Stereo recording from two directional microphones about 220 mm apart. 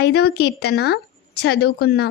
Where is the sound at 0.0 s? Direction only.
45° left (ahead or behind).